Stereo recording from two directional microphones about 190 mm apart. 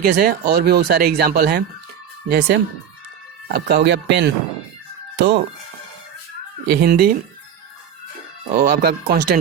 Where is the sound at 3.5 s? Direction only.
55° right (ahead or behind).